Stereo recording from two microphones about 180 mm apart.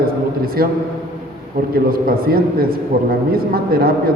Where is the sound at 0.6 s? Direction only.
55° right (ahead or behind).